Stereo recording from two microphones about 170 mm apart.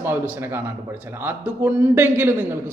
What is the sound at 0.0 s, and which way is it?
A man's voice, 10° right (ahead or behind).